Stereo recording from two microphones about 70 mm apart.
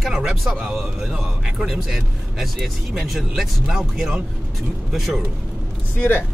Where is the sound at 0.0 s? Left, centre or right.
Centre.